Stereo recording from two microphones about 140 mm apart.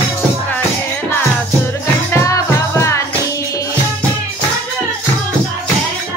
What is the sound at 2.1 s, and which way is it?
Music, 20° left (ahead or behind).